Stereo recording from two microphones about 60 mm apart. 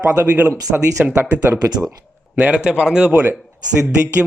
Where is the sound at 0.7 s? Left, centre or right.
Centre.